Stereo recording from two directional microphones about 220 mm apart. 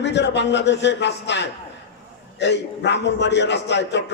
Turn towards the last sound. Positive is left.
turn(degrees=50)  # may be behind; listen again after turning